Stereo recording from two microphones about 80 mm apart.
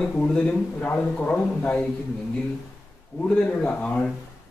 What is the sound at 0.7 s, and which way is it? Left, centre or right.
Speech, centre.